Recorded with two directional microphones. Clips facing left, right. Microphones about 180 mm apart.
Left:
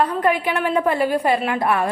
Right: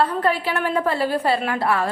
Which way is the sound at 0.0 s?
15° left (ahead or behind).